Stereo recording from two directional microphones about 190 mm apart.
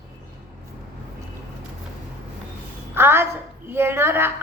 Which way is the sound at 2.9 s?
10° right (ahead or behind).